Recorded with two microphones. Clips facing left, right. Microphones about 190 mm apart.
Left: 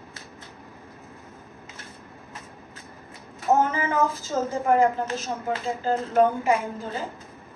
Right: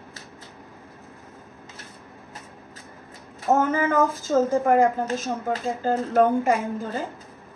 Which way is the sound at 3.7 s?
50° right (ahead or behind).